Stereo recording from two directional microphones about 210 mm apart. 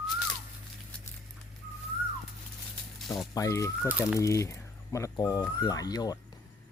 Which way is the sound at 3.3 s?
15° left (ahead or behind).